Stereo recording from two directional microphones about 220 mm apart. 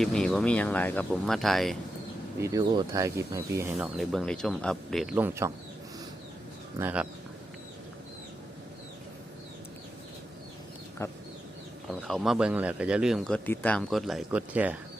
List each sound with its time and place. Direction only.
0.0 s speech: centre (ahead or behind)
2.4 s speech: 15° right (ahead or behind)
3.9 s speech: centre (ahead or behind)
5.1 s speech: 10° right (ahead or behind)
6.7 s speech: 5° right (ahead or behind)
11.0 s a sound: 10° left (ahead or behind)
12.0 s speech: centre (ahead or behind)